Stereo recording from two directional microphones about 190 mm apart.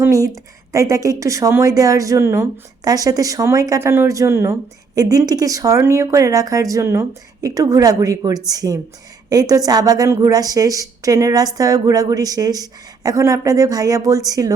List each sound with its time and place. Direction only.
0.0 s a woman's voice: 15° right (ahead or behind)